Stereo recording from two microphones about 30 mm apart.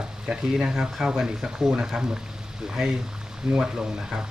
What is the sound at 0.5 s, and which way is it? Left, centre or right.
Speech, centre.